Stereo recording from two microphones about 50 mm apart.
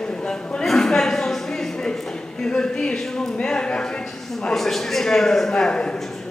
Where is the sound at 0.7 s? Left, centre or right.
Centre.